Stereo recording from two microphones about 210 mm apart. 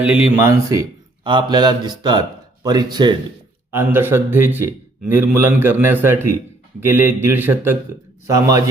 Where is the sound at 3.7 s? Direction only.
10° right (ahead or behind).